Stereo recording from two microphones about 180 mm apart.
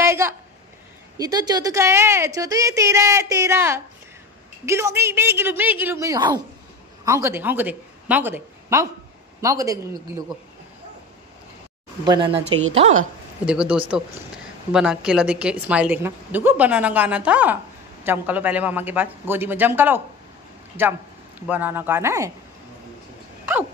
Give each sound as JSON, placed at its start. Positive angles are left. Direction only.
{"t": 0.0, "sound": "a sound", "side_deg": -15}
{"t": 1.1, "sound": "a woman's voice", "side_deg": -20}
{"t": 12.0, "sound": "speech", "side_deg": -25}
{"t": 13.5, "sound": "a woman's voice", "side_deg": -5}
{"t": 21.4, "sound": "a woman's voice", "side_deg": -10}